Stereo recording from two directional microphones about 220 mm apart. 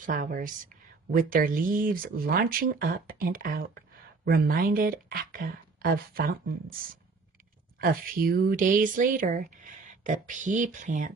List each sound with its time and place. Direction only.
0.0 s speech: 40° right (ahead or behind)
7.8 s speech: 40° right (ahead or behind)